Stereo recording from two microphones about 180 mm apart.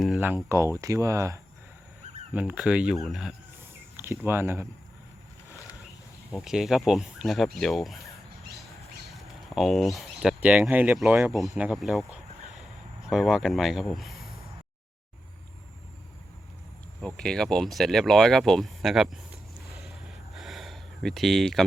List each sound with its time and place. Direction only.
0.2 s speech: 10° right (ahead or behind)
3.9 s speech: 15° right (ahead or behind)
6.3 s speech: centre (ahead or behind)
9.0 s speech: centre (ahead or behind)
17.2 s speech: 5° left (ahead or behind)
20.3 s a sound: centre (ahead or behind)